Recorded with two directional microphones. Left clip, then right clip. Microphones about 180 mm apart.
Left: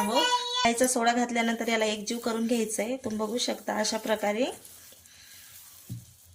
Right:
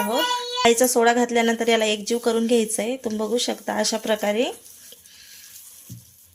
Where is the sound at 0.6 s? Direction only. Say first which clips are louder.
Right 10 dB; 50° right (ahead or behind).